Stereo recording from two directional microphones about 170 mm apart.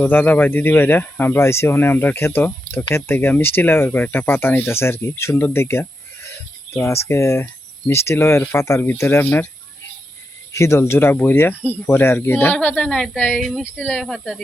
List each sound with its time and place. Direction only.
0.0 s speech: 10° left (ahead or behind)
10.5 s speech: 15° left (ahead or behind)